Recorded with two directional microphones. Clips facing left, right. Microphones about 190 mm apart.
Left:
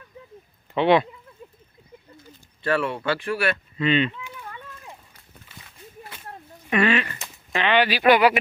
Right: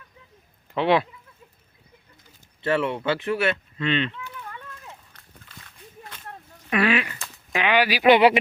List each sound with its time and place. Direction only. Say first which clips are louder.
0.7 s speech: left 2 dB; centre (ahead or behind)
2.6 s speech: right 1 dB; 20° right (ahead or behind)
3.8 s speech: left 3 dB; 5° left (ahead or behind)
4.9 s a sound: left 1 dB; 10° left (ahead or behind)
6.7 s speech: left 1 dB; 5° right (ahead or behind)
8.0 s speech: right 2 dB; 25° right (ahead or behind)